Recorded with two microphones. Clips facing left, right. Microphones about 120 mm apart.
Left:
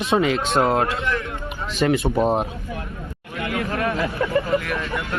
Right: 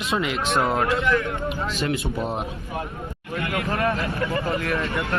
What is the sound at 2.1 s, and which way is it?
Speech, 40° left (ahead or behind).